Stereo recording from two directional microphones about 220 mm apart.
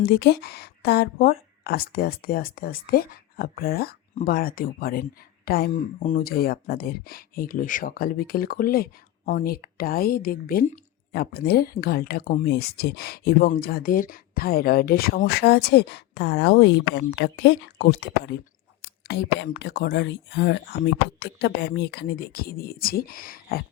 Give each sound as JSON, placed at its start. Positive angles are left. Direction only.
{"t": 0.0, "sound": "speech", "side_deg": 50}